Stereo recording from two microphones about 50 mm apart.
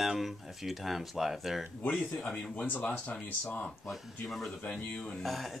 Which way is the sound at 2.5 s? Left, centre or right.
Left.